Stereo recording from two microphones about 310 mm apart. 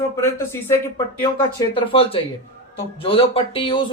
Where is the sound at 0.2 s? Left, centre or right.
Centre.